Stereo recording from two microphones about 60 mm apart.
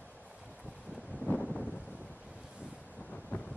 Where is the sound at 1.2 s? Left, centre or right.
Centre.